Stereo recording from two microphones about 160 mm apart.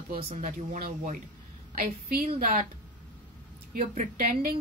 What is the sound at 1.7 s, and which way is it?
Speech, 70° right (ahead or behind).